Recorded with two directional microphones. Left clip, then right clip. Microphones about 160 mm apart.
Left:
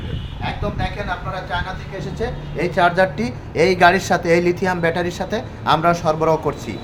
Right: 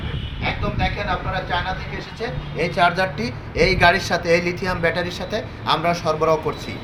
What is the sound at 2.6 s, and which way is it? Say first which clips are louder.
A man's voice: left 2 dB; 75° left (ahead or behind).